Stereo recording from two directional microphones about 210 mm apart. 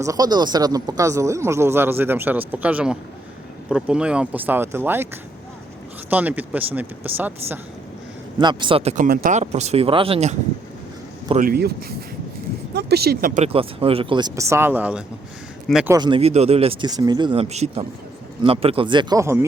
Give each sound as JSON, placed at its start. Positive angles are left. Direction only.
{"t": 0.0, "sound": "speech", "side_deg": -15}
{"t": 6.1, "sound": "speech", "side_deg": -10}
{"t": 8.4, "sound": "speech", "side_deg": -20}
{"t": 11.3, "sound": "speech", "side_deg": -45}
{"t": 13.4, "sound": "speech", "side_deg": -25}
{"t": 16.0, "sound": "speech", "side_deg": -25}